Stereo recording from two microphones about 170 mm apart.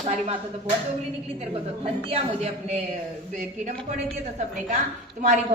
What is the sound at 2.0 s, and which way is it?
Speech, 35° right (ahead or behind).